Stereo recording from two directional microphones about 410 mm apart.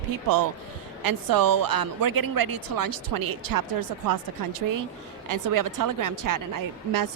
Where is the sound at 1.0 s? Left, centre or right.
Right.